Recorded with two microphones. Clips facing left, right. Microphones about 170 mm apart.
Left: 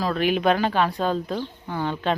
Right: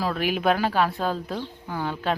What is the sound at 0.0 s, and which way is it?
Speech, 10° right (ahead or behind).